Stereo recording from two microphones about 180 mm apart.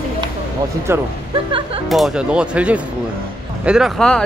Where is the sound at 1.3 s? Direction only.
30° right (ahead or behind).